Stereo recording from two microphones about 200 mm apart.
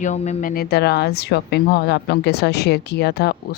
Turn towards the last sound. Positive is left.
turn(degrees=55)  # may be behind; listen again after turning